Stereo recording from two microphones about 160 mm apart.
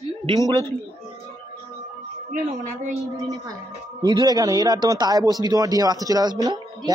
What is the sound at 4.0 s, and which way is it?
Speech, 30° right (ahead or behind).